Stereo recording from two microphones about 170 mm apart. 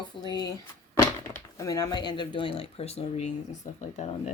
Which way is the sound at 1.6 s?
20° left (ahead or behind).